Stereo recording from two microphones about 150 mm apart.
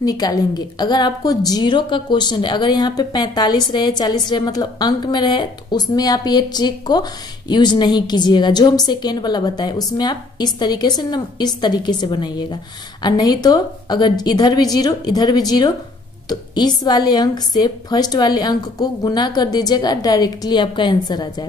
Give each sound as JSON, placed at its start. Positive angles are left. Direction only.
{"t": 0.0, "sound": "a woman's voice", "side_deg": 25}